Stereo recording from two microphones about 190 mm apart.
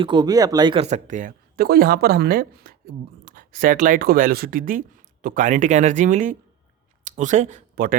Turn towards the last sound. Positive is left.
turn(degrees=-45)  # may be behind; listen again after turning